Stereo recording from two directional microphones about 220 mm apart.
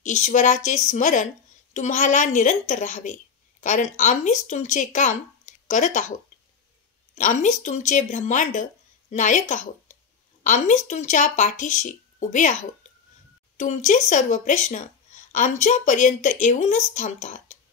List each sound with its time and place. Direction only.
0.0 s speech: 35° left (ahead or behind)
7.2 s speech: 35° left (ahead or behind)
13.6 s speech: 35° left (ahead or behind)